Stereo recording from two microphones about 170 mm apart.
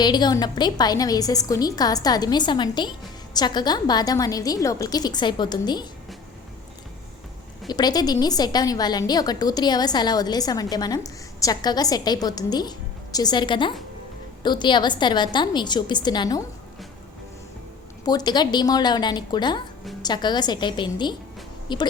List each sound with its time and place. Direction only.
0.0 s a woman's voice: 25° left (ahead or behind)
7.7 s a woman's voice: 25° left (ahead or behind)
18.0 s a woman's voice: 25° left (ahead or behind)